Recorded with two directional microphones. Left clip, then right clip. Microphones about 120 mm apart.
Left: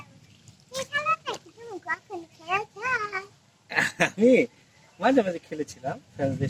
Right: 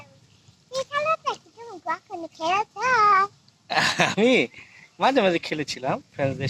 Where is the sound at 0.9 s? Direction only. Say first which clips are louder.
Right 2 dB; 30° right (ahead or behind).